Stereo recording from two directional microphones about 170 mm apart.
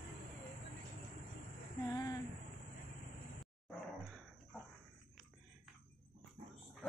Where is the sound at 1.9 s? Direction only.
20° left (ahead or behind).